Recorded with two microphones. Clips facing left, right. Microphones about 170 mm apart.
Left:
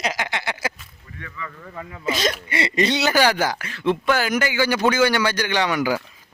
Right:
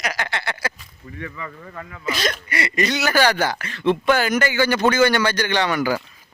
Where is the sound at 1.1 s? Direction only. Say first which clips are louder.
Right 3 dB; 25° right (ahead or behind).